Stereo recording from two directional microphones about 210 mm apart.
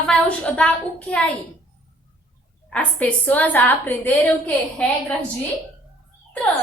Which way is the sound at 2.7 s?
5° left (ahead or behind).